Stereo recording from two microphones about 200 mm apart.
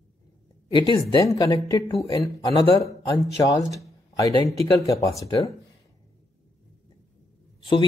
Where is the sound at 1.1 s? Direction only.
15° left (ahead or behind).